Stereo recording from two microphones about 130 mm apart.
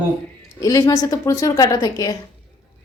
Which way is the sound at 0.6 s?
25° left (ahead or behind).